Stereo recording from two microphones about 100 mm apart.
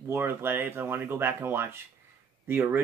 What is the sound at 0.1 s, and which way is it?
Speech, 20° right (ahead or behind).